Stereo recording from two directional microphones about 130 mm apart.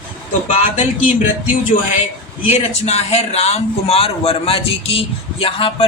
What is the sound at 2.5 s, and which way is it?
A man's voice, 55° left (ahead or behind).